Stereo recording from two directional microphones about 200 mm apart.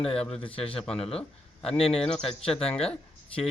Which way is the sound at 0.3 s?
25° left (ahead or behind).